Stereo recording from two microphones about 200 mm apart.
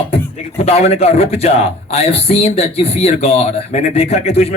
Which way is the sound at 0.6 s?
30° left (ahead or behind).